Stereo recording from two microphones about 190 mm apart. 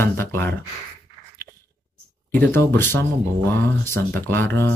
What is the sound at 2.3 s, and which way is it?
Speech, 10° left (ahead or behind).